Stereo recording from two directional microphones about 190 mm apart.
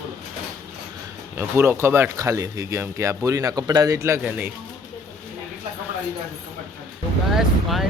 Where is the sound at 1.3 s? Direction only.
15° right (ahead or behind).